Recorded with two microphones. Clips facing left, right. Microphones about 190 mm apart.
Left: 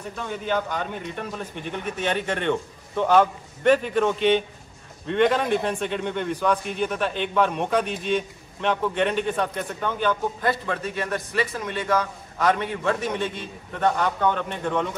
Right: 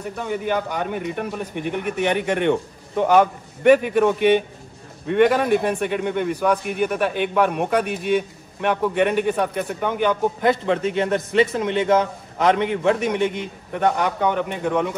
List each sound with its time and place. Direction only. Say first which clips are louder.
0.1 s a man's voice: right 3 dB; 15° right (ahead or behind)